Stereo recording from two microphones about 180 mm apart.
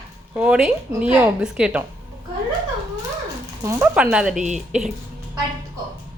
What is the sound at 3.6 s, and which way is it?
Speech, 15° right (ahead or behind).